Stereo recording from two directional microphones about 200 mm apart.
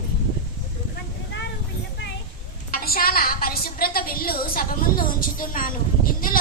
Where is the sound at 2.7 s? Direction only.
45° left (ahead or behind).